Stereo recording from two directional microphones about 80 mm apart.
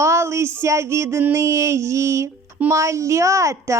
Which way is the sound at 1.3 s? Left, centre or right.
Right.